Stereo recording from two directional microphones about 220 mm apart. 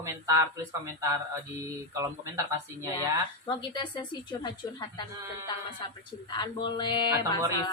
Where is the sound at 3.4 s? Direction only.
20° left (ahead or behind).